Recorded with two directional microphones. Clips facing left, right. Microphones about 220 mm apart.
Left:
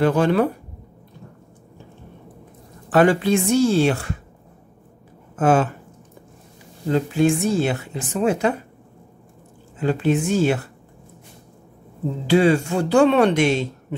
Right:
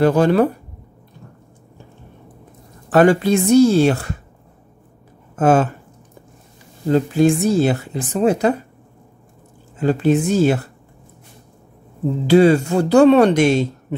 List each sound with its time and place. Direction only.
0.0 s speech: 40° right (ahead or behind)
2.9 s speech: 45° right (ahead or behind)
5.3 s speech: 40° right (ahead or behind)
6.9 s speech: 40° right (ahead or behind)
9.8 s speech: 40° right (ahead or behind)
12.3 s speech: 40° right (ahead or behind)